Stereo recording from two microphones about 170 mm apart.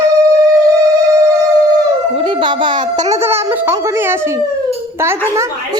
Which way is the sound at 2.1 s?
30° right (ahead or behind).